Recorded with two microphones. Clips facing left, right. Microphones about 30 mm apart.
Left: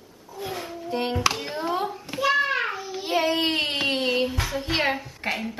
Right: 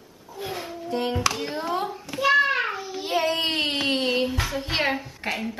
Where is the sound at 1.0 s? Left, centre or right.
Centre.